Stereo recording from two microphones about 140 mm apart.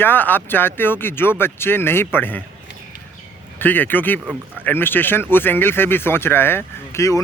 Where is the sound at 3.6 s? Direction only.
15° left (ahead or behind).